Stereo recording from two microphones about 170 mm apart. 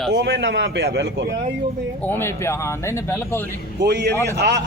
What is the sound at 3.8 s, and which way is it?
Speech, 80° right.